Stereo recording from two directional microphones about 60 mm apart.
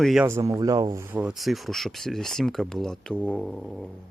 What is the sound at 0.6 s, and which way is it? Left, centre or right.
Speech, right.